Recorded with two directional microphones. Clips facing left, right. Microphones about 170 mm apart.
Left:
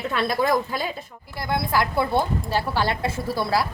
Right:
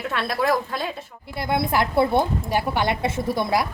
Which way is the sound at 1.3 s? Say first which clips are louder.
Right 2 dB; 25° right (ahead or behind).